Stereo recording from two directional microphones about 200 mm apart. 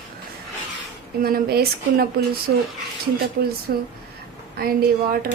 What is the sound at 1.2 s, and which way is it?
Speech, 50° right (ahead or behind).